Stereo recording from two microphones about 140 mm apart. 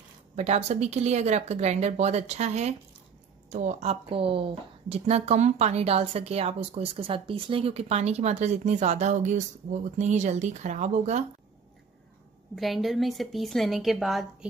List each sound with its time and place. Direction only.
0.4 s speech: 50° right (ahead or behind)
12.5 s a woman's voice: centre (ahead or behind)